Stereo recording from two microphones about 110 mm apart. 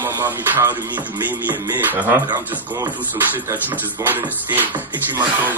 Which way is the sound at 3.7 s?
15° right (ahead or behind).